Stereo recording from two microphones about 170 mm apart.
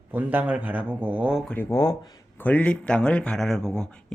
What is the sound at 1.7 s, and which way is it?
Speech, 25° left (ahead or behind).